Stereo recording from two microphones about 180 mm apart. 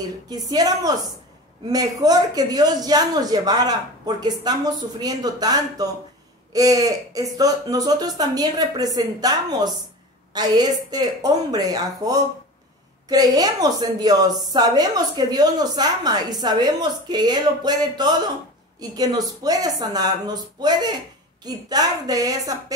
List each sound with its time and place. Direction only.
0.3 s a man's voice: 20° right (ahead or behind)